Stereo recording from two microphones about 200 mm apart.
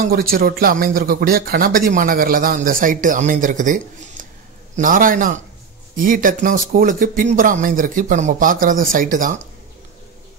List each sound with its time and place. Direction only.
0.0 s speech: 50° right (ahead or behind)